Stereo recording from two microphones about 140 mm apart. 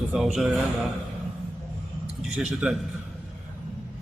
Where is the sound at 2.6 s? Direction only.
5° right (ahead or behind).